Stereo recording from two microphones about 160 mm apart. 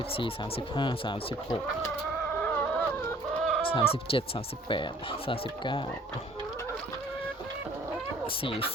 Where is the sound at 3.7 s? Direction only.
35° left (ahead or behind).